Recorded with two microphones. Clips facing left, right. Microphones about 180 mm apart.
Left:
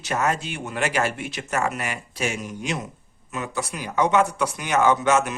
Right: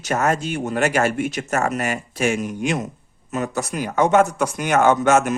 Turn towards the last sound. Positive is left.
turn(degrees=-50)  # may be behind; listen again after turning